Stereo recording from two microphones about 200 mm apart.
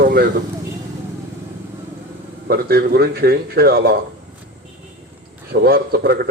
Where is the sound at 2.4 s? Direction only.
50° right (ahead or behind).